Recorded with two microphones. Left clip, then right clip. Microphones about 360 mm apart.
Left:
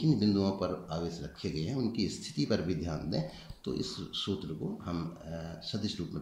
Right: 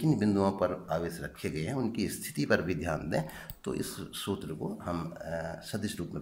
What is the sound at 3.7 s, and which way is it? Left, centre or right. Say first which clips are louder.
Speech: left 2 dB; centre.